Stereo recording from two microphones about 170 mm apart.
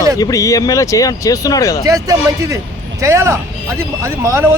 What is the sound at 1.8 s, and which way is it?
Speech, 20° right (ahead or behind).